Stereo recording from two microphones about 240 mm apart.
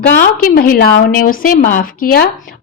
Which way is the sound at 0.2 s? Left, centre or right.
Left.